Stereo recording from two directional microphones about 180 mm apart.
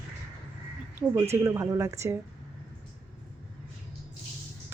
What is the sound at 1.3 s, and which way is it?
Speech, 15° right (ahead or behind).